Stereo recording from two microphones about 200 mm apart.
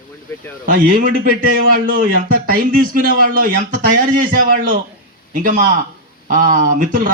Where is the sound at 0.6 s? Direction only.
45° right (ahead or behind).